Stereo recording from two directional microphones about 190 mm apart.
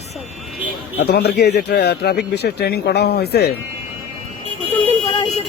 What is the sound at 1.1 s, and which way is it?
Speech, 60° left (ahead or behind).